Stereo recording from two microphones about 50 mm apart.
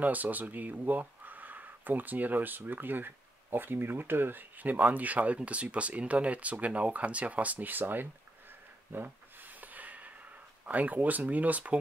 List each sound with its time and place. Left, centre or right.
0.0 s speech: right
8.9 s a sound: right
10.6 s speech: right